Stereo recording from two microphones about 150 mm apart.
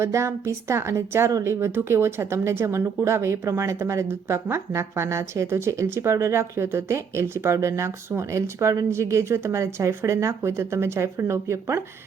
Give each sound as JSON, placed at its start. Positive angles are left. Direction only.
{"t": 0.0, "sound": "a woman's voice", "side_deg": -20}